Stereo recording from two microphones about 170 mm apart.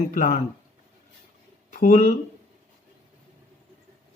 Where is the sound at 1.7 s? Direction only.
45° left (ahead or behind).